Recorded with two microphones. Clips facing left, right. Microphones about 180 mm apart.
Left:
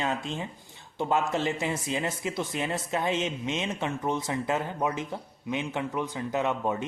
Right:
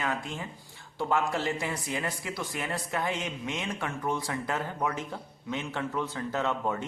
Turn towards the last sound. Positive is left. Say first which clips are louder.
# left 2 dB
turn(degrees=20)  # may be behind; listen again after turning